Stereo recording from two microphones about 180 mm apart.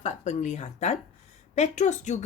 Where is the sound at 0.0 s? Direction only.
40° left (ahead or behind).